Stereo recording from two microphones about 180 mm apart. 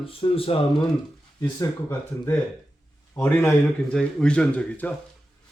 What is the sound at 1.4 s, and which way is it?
Speech, 20° left (ahead or behind).